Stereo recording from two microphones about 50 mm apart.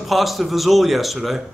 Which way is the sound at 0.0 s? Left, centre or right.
Centre.